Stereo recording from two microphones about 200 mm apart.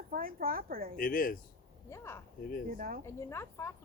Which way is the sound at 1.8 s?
15° left (ahead or behind).